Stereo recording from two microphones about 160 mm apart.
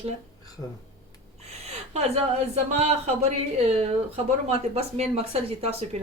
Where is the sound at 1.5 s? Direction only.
40° right (ahead or behind).